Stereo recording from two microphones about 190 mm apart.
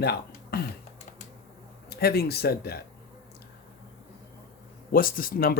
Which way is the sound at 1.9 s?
55° left (ahead or behind).